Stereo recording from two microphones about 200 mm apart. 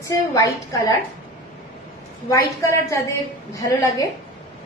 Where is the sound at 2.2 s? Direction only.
15° left (ahead or behind).